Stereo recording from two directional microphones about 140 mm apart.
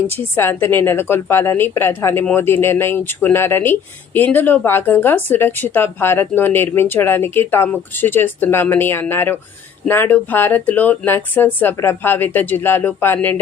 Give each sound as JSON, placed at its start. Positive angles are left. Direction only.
{"t": 0.3, "sound": "a woman's voice", "side_deg": 15}